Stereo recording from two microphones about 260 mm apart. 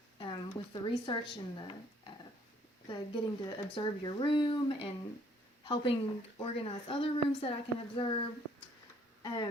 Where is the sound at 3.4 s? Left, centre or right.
Centre.